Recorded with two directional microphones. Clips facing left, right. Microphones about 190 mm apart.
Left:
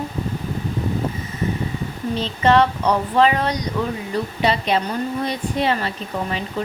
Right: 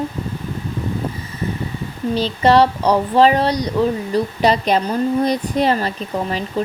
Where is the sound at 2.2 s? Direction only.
35° right (ahead or behind).